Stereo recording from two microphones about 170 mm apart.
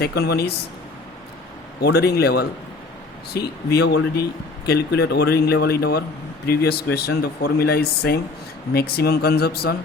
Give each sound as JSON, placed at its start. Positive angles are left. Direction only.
{"t": 0.0, "sound": "a man's voice", "side_deg": 70}
{"t": 1.8, "sound": "a man's voice", "side_deg": 70}
{"t": 3.8, "sound": "a man's voice", "side_deg": 75}